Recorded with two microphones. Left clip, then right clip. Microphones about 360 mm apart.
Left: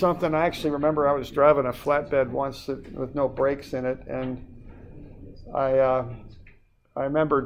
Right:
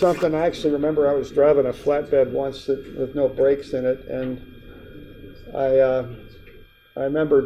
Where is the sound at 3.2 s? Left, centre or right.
Left.